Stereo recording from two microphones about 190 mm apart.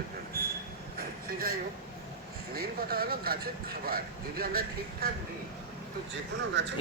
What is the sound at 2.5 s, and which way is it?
Speech, 55° right (ahead or behind).